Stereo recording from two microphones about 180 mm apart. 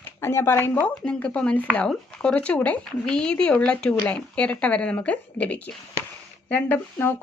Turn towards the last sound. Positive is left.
turn(degrees=10)  # may be behind; listen again after turning